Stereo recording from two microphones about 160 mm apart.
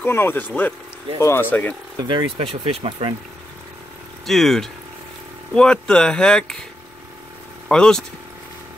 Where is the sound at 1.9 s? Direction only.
30° right (ahead or behind).